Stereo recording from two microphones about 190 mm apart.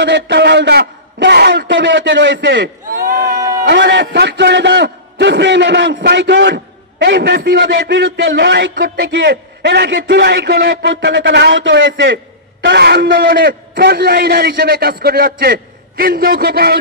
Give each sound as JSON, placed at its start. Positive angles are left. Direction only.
{"t": 0.0, "sound": "a man's voice", "side_deg": -65}
{"t": 2.6, "sound": "a sound", "side_deg": -50}
{"t": 3.3, "sound": "a sound", "side_deg": -15}
{"t": 3.6, "sound": "a man's voice", "side_deg": -65}
{"t": 7.1, "sound": "a man's voice", "side_deg": -55}
{"t": 7.9, "sound": "a man's voice", "side_deg": -85}
{"t": 8.4, "sound": "a man's voice", "side_deg": -55}
{"t": 9.1, "sound": "a man's voice", "side_deg": -70}
{"t": 10.8, "sound": "a man's voice", "side_deg": -90}
{"t": 12.6, "sound": "a man's voice", "side_deg": -60}